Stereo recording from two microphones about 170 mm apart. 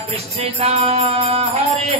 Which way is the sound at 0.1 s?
40° right (ahead or behind).